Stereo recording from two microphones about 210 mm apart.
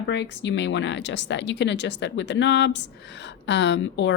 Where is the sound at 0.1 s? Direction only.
55° left (ahead or behind).